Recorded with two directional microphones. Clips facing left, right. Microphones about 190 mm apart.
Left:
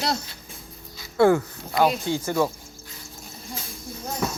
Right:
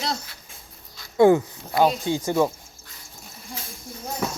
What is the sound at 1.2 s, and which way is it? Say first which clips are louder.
Speech: right 2 dB; 15° right (ahead or behind).